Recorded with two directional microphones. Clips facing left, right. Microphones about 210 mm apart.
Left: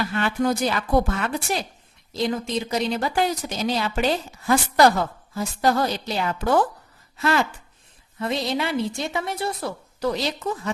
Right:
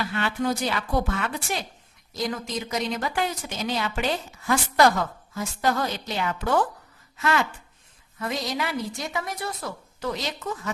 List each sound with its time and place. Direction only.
0.1 s a woman's voice: 45° left (ahead or behind)
2.1 s a woman's voice: 25° left (ahead or behind)